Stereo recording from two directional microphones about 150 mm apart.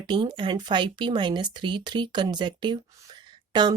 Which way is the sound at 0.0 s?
30° right (ahead or behind).